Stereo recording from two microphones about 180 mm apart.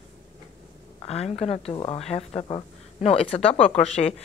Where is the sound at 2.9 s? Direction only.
35° left (ahead or behind).